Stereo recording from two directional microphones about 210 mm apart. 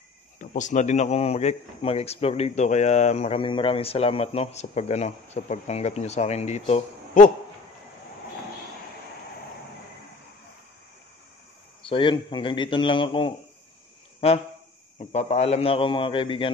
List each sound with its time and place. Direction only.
0.4 s a man's voice: 35° left (ahead or behind)
11.8 s a man's voice: 25° left (ahead or behind)
15.0 s a man's voice: 30° left (ahead or behind)